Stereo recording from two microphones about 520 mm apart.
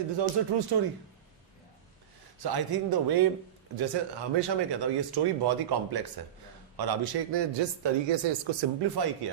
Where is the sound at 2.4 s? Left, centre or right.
Right.